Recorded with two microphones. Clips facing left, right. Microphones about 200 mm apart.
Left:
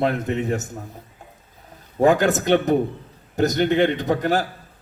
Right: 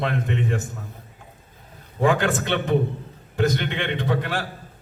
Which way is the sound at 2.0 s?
40° left (ahead or behind).